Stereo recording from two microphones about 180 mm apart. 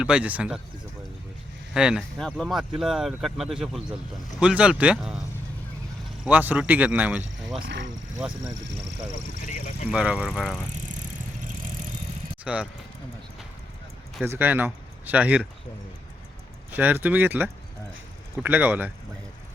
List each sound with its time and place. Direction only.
0.0 s speech: 5° right (ahead or behind)
1.7 s speech: 5° right (ahead or behind)
6.2 s speech: 10° right (ahead or behind)
7.6 s speech: 80° right
8.2 s speech: 5° right (ahead or behind)
9.5 s vehicle: 45° left (ahead or behind)
9.9 s speech: 5° right (ahead or behind)
12.5 s speech: 5° right (ahead or behind)
14.3 s speech: 10° right (ahead or behind)
16.7 s speech: 10° right (ahead or behind)